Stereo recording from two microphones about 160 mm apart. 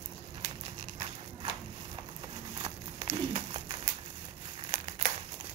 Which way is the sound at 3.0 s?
40° right (ahead or behind).